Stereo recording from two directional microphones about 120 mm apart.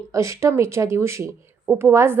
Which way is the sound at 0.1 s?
25° right (ahead or behind).